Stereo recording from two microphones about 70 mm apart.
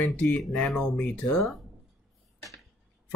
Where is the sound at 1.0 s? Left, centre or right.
Centre.